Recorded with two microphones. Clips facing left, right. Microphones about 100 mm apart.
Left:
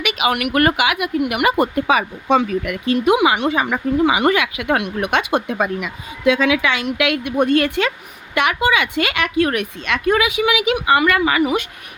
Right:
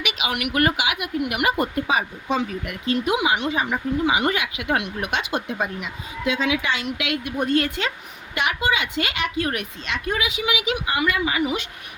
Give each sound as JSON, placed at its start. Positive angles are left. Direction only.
{"t": 0.0, "sound": "speech", "side_deg": 55}
{"t": 8.4, "sound": "a woman's voice", "side_deg": 65}